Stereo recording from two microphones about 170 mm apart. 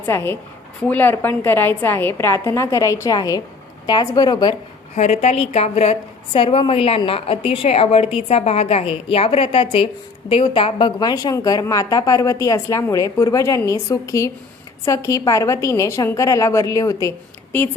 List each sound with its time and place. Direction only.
0.0 s a woman's voice: 15° left (ahead or behind)
4.9 s a woman's voice: 40° left (ahead or behind); by 17.1 s 20° left (ahead or behind)